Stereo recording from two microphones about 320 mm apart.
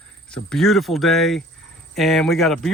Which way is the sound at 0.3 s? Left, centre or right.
Centre.